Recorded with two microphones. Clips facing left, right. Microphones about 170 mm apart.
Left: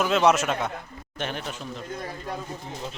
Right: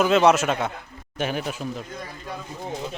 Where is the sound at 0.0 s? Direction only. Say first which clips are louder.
Right 3 dB; centre (ahead or behind).